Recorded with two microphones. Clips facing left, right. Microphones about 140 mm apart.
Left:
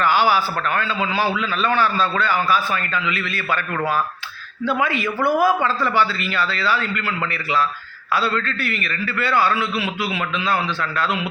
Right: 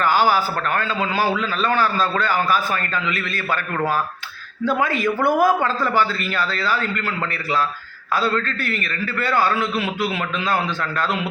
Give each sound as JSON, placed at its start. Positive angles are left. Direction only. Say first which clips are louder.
{"t": 0.0, "sound": "a man's voice", "louder": "even", "side_deg": -40}